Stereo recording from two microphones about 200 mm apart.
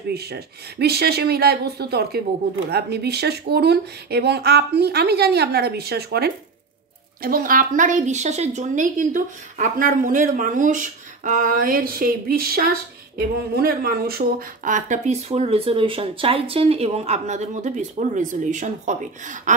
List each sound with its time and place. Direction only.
0.1 s speech: 55° right (ahead or behind)